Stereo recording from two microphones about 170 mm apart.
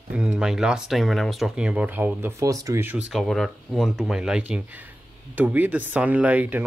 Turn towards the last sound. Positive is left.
turn(degrees=-10)  # may be behind; listen again after turning